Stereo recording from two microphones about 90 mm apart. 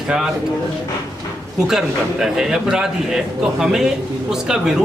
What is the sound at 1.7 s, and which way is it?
A man's voice, 5° right (ahead or behind).